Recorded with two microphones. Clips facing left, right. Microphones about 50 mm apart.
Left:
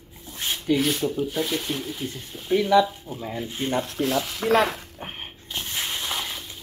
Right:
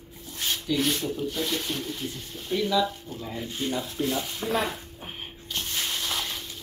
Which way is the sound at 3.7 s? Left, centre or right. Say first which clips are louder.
Left 6 dB; left.